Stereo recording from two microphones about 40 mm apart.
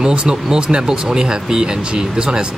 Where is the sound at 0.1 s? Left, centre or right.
Right.